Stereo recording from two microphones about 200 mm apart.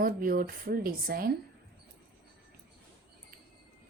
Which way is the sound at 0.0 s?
45° right (ahead or behind).